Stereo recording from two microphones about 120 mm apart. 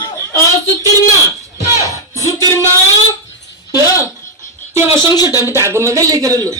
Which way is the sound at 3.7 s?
30° left (ahead or behind).